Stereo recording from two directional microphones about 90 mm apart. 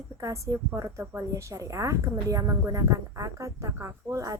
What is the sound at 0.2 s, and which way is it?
A woman's voice, 35° right (ahead or behind).